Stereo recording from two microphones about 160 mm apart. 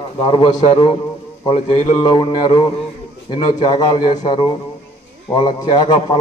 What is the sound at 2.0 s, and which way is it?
A man's voice, 25° left (ahead or behind).